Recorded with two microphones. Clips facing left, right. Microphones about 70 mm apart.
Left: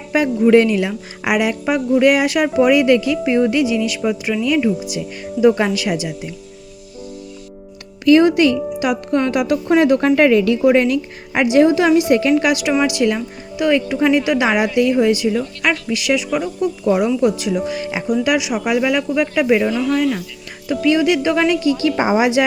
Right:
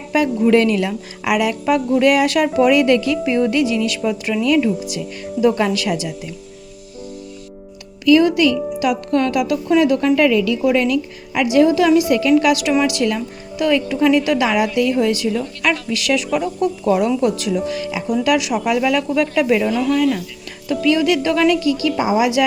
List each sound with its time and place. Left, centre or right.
0.1 s a woman's voice: left
8.0 s a woman's voice: left
8.8 s a woman's voice: centre
17.7 s speech: left
18.2 s a woman's voice: centre; by 22.2 s left
22.2 s speech: left